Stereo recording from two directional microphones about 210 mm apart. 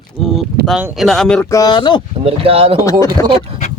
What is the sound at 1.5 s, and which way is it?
Speech, 20° left (ahead or behind).